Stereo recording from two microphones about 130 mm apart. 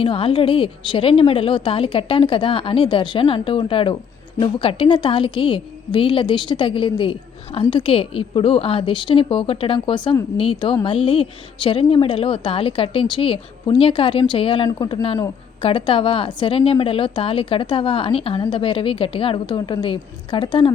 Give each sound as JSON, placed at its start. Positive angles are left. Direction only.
{"t": 0.0, "sound": "a woman's voice", "side_deg": 45}